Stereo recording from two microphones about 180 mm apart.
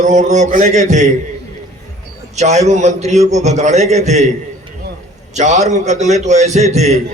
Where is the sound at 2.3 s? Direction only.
40° right (ahead or behind).